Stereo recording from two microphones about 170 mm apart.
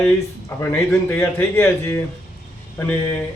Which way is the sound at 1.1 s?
10° left (ahead or behind).